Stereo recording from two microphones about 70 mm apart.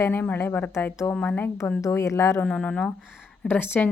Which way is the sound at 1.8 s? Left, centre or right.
Left.